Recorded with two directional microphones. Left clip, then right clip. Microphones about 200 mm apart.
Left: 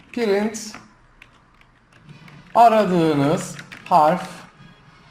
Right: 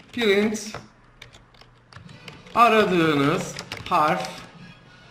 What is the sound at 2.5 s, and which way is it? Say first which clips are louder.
Speech: left 3 dB; 20° left (ahead or behind).